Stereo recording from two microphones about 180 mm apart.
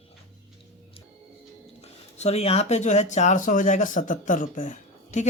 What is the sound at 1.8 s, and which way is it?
Speech, 35° left (ahead or behind).